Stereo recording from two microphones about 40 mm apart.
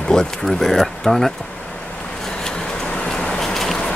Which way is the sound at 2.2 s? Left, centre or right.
Centre.